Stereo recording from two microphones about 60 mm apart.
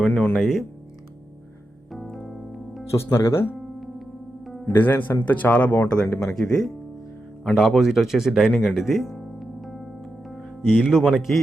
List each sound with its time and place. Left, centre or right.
0.3 s speech: centre
1.9 s music: centre
2.9 s speech: left
4.7 s speech: left
6.0 s speech: centre
7.5 s speech: centre
9.1 s music: centre
10.7 s speech: centre